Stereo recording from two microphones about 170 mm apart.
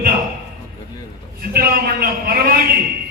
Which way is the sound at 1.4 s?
60° right (ahead or behind).